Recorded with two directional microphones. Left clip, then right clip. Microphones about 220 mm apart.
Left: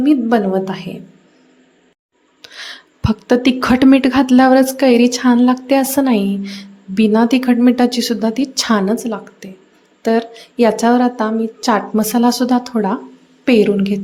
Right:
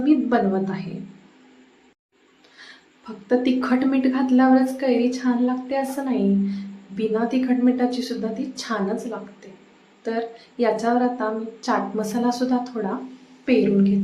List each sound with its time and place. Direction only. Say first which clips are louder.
0.0 s a woman's voice: left 6 dB; 35° left (ahead or behind)
3.0 s a woman's voice: left 8 dB; 45° left (ahead or behind)